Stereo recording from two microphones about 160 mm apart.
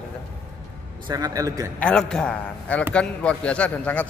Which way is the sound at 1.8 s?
5° left (ahead or behind).